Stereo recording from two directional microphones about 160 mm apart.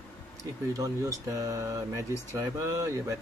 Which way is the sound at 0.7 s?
20° right (ahead or behind).